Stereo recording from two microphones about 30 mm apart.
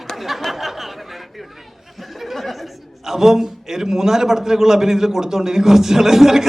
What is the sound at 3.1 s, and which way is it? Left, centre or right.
A man's voice, centre.